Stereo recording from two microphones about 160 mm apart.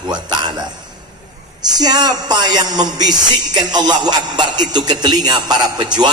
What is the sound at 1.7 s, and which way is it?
Speech, 25° right (ahead or behind).